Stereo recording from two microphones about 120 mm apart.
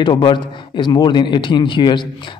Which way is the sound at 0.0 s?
45° left (ahead or behind).